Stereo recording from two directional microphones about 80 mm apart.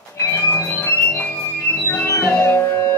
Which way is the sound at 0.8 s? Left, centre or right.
Left.